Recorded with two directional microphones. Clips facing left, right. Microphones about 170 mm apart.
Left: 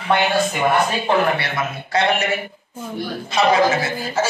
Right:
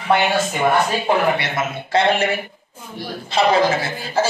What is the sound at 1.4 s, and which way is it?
Speech, 25° right (ahead or behind).